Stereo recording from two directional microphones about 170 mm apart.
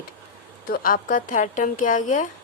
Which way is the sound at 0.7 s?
55° left (ahead or behind).